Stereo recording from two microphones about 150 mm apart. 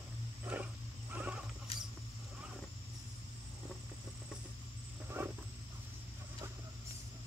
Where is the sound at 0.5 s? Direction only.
10° right (ahead or behind).